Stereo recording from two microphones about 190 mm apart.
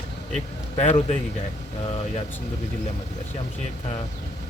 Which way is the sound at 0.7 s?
35° left (ahead or behind).